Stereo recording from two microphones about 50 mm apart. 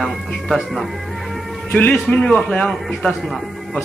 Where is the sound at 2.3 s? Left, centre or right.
Left.